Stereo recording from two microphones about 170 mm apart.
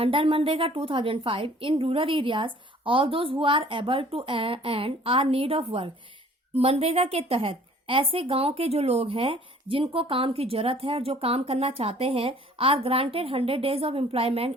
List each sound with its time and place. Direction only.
0.0 s a woman's voice: 30° right (ahead or behind)